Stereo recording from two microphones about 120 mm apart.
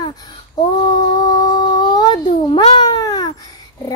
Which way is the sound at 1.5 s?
35° left (ahead or behind).